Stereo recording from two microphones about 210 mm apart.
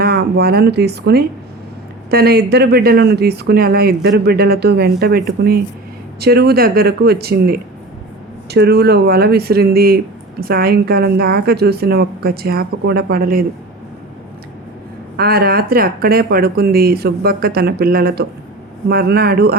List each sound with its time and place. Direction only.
0.0 s speech: 50° right (ahead or behind)
15.1 s speech: 45° right (ahead or behind)